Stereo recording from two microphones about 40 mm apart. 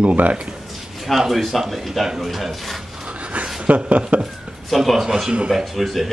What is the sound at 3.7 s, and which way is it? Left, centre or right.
Rub, right.